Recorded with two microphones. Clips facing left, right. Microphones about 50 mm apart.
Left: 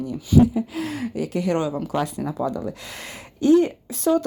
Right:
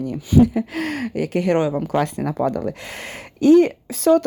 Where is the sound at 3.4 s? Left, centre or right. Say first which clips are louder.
Right 4 dB; right.